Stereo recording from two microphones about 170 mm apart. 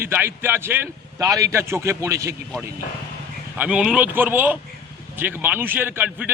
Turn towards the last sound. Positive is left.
turn(degrees=-10)  # may be behind; listen again after turning